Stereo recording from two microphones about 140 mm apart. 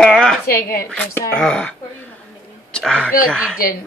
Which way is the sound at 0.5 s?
90° left.